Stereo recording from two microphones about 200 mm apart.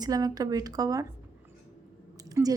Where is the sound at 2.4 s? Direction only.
10° right (ahead or behind).